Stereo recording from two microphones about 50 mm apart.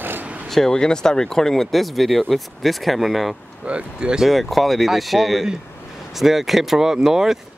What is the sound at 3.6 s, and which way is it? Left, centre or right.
Speech, right.